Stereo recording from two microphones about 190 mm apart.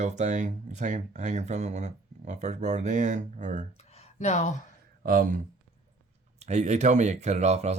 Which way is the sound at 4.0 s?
35° left (ahead or behind).